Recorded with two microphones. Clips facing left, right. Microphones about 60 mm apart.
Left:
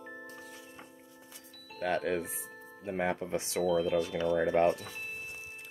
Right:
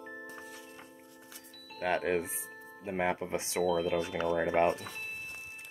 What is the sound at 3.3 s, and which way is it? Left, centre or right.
Speech, centre.